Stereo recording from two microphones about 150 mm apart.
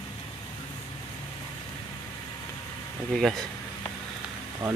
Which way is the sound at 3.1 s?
Centre (ahead or behind).